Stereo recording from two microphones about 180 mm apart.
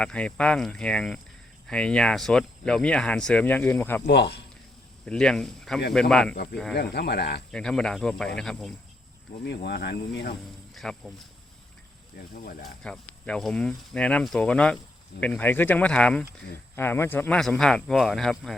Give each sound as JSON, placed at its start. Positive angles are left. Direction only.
{"t": 0.0, "sound": "speech", "side_deg": 5}
{"t": 4.0, "sound": "speech", "side_deg": 70}
{"t": 5.0, "sound": "speech", "side_deg": 5}
{"t": 6.3, "sound": "speech", "side_deg": 65}
{"t": 7.5, "sound": "speech", "side_deg": 5}
{"t": 9.4, "sound": "speech", "side_deg": 65}
{"t": 10.8, "sound": "speech", "side_deg": 0}
{"t": 12.6, "sound": "speech", "side_deg": 5}